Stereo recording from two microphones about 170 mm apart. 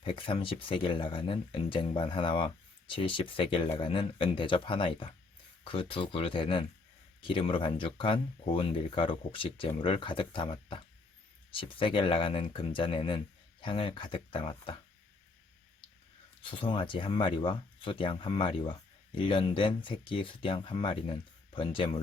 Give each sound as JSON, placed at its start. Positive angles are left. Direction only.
{"t": 0.0, "sound": "speech", "side_deg": 30}
{"t": 16.4, "sound": "speech", "side_deg": 30}